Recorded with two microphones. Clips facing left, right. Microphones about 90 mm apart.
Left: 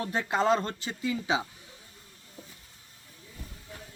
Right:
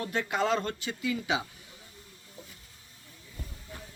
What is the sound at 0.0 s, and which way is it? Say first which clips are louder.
Speech: left 2 dB; 30° left (ahead or behind).